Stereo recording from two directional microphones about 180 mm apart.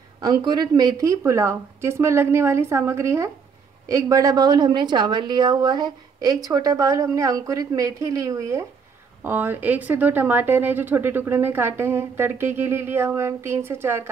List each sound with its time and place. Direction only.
0.2 s a woman's voice: 20° right (ahead or behind)